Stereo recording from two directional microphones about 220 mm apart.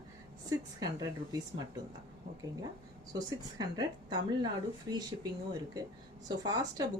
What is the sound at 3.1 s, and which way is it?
A woman's voice, 15° right (ahead or behind).